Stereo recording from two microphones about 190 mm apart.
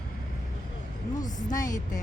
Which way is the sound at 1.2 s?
20° left (ahead or behind).